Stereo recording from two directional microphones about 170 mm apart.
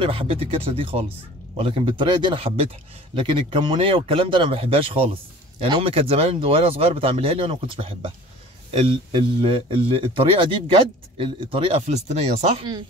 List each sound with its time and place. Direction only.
0.0 s speech: 35° right (ahead or behind)